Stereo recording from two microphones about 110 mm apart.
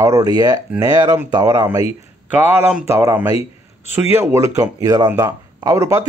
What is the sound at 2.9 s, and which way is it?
Speech, 30° right (ahead or behind).